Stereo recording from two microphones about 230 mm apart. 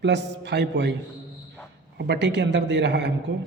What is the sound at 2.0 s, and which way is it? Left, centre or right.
Speech, right.